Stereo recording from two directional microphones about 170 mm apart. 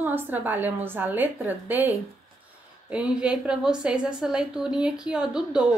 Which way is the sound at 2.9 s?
5° right (ahead or behind).